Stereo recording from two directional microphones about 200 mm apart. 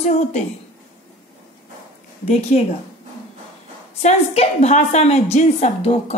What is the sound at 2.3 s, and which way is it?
Speech, 30° left (ahead or behind).